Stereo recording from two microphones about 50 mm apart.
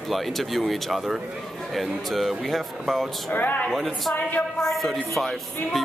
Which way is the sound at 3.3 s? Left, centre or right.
Left.